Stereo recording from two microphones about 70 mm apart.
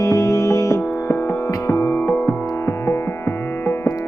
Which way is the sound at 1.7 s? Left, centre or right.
Left.